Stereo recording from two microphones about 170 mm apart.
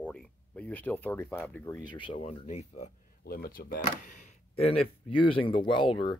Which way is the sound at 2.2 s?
40° left (ahead or behind).